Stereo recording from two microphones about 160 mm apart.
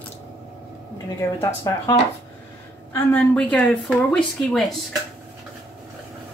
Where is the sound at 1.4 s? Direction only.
20° left (ahead or behind); by 4.7 s 5° left (ahead or behind).